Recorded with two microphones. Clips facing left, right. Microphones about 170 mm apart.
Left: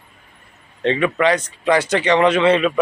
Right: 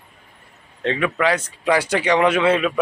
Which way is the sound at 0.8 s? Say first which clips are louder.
Left 3 dB; centre (ahead or behind).